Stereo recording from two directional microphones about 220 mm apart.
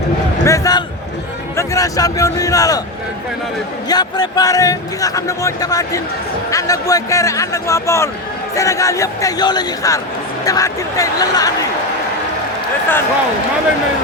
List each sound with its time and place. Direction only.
0.4 s speech: 15° left (ahead or behind)
3.8 s speech: 20° left (ahead or behind)